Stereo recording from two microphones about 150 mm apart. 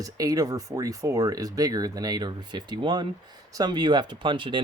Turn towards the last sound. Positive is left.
turn(degrees=-30)  # may be behind; listen again after turning